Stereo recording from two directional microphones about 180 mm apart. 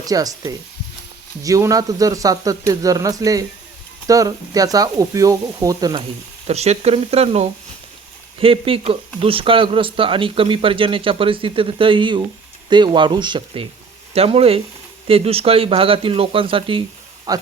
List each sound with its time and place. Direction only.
0.0 s speech: 20° right (ahead or behind)
6.5 s speech: 35° right (ahead or behind); by 17.4 s 20° right (ahead or behind)